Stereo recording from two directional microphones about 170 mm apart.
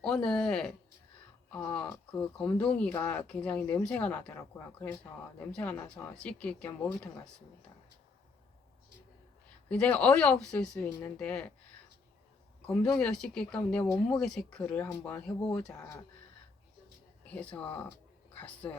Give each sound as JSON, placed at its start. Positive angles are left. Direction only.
{"t": 0.0, "sound": "speech", "side_deg": 5}
{"t": 9.6, "sound": "speech", "side_deg": 10}
{"t": 12.6, "sound": "speech", "side_deg": 5}
{"t": 13.8, "sound": "speech", "side_deg": 20}
{"t": 14.2, "sound": "speech", "side_deg": 5}
{"t": 15.7, "sound": "speech", "side_deg": 20}
{"t": 17.2, "sound": "speech", "side_deg": 10}